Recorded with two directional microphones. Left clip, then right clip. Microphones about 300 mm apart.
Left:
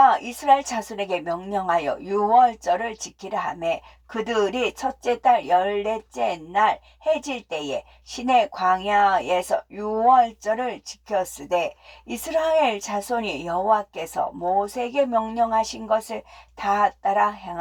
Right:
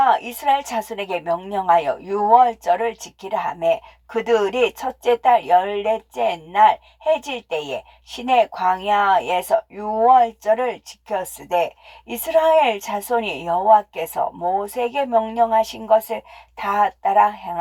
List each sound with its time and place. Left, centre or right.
0.7 s speech: right
8.1 s speech: right